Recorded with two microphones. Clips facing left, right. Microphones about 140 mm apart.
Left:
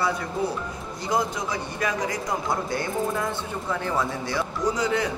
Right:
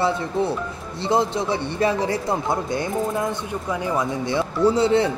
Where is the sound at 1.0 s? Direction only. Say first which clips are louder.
Right 5 dB; 30° right (ahead or behind).